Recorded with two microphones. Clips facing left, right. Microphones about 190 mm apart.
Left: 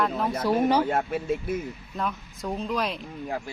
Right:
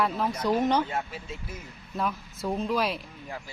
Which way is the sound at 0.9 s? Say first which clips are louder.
Left 8 dB; 55° left (ahead or behind).